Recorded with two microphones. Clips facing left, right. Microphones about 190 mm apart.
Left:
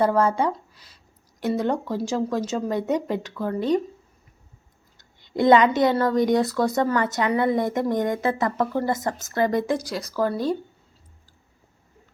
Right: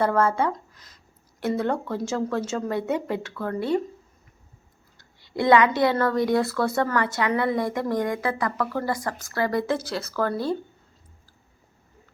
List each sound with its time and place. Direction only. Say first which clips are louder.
0.0 s speech: left 2 dB; 15° left (ahead or behind)
4.9 s a woman's voice: left 3 dB; 20° left (ahead or behind)